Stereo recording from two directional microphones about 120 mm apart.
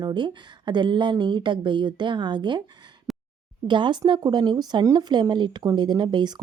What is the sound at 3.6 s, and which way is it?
Speech, 40° right (ahead or behind).